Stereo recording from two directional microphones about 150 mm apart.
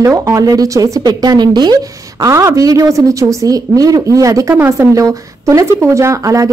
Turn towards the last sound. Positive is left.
turn(degrees=-20)  # may be behind; listen again after turning